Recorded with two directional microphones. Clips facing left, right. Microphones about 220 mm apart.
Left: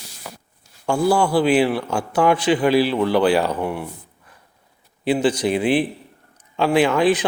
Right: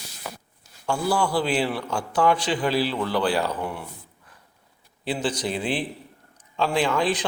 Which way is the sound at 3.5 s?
60° left (ahead or behind).